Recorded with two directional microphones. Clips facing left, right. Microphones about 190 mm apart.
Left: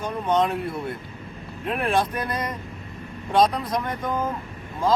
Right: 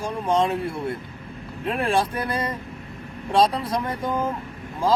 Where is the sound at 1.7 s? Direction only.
30° right (ahead or behind).